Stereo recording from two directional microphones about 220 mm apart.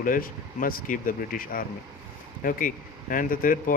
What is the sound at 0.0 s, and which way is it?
A man's voice, 40° left (ahead or behind).